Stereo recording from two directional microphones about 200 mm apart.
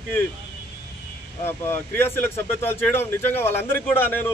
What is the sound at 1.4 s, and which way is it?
Speech, 10° left (ahead or behind).